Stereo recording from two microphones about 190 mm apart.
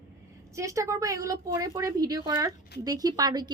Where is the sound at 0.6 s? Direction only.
15° right (ahead or behind).